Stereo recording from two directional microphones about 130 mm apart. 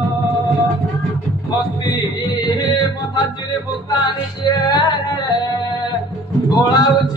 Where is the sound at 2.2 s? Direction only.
30° left (ahead or behind).